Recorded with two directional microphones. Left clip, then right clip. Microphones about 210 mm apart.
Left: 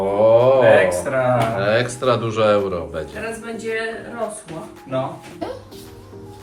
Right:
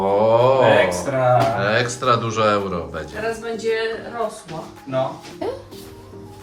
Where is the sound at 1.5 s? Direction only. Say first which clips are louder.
Left 1 dB; centre (ahead or behind).